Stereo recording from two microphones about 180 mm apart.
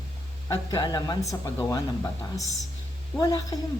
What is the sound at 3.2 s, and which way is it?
Speech, 20° left (ahead or behind).